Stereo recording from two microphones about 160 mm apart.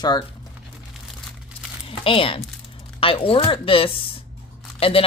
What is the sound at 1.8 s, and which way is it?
Speech, 35° left (ahead or behind).